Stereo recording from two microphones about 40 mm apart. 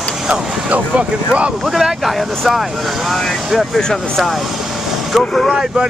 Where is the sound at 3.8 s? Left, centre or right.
Centre.